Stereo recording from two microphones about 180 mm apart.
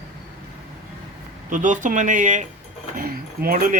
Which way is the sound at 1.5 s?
45° right (ahead or behind).